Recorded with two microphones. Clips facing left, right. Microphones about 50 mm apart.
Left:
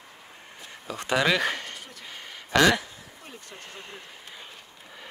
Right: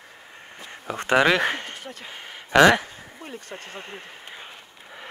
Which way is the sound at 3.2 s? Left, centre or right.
Right.